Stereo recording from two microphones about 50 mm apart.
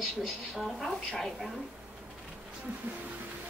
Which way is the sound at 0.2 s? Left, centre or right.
Centre.